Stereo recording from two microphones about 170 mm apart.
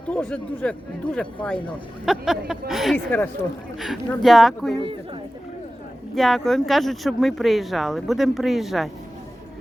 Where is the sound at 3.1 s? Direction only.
10° left (ahead or behind).